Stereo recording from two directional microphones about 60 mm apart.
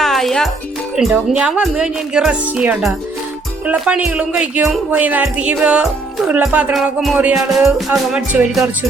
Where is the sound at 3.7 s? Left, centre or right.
Right.